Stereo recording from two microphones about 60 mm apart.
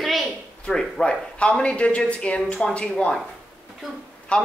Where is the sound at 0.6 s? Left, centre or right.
Centre.